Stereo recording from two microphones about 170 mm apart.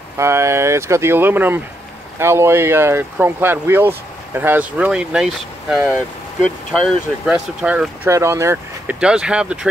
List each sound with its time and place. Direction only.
0.2 s speech: 15° right (ahead or behind)
9.0 s speech: 5° right (ahead or behind)